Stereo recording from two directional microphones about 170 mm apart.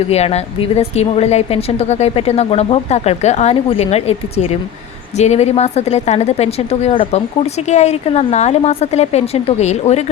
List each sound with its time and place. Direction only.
0.1 s speech: 40° left (ahead or behind)